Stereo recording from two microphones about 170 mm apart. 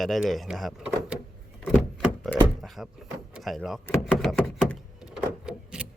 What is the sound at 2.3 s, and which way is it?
Speech, centre (ahead or behind).